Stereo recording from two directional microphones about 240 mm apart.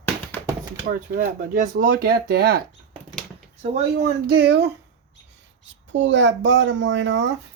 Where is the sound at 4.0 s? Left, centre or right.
Right.